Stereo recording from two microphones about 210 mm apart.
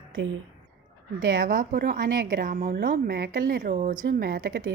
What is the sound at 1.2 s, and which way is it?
A woman's voice, 45° right (ahead or behind).